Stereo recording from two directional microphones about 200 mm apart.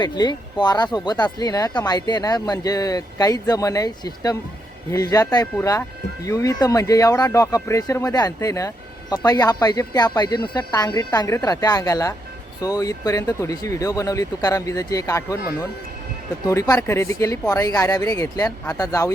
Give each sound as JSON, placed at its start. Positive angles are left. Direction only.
{"t": 0.0, "sound": "speech", "side_deg": 20}
{"t": 16.5, "sound": "speech", "side_deg": 15}